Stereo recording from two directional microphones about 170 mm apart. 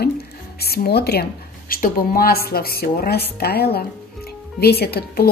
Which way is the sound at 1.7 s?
60° left (ahead or behind).